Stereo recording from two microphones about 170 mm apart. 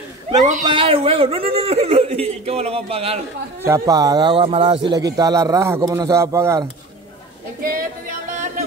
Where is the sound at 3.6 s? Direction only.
20° right (ahead or behind).